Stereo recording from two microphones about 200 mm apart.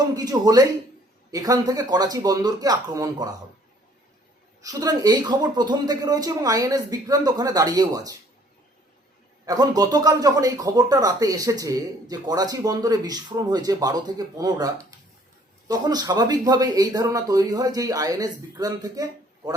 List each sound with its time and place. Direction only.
0.1 s speech: 20° right (ahead or behind)
4.6 s speech: 20° right (ahead or behind)
9.5 s speech: 20° right (ahead or behind)